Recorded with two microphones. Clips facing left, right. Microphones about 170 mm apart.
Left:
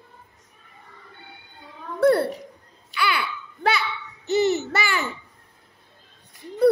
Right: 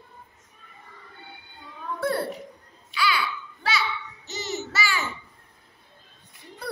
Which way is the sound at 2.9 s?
60° left (ahead or behind).